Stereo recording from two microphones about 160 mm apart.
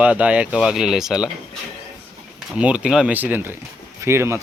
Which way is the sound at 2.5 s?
5° right (ahead or behind).